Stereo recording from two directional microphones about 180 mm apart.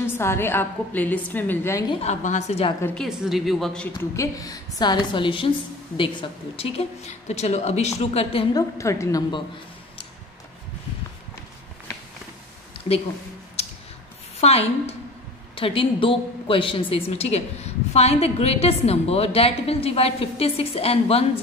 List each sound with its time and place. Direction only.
0.0 s a woman's voice: 15° left (ahead or behind)
2.0 s a woman's voice: 40° left (ahead or behind)
2.8 s a woman's voice: 10° left (ahead or behind); by 8.5 s 35° left (ahead or behind)
8.5 s a woman's voice: 15° left (ahead or behind)
12.7 s a sound: 35° left (ahead or behind)
14.4 s a woman's voice: 35° left (ahead or behind)